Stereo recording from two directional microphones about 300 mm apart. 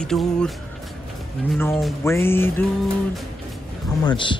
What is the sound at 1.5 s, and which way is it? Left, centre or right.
Music, centre.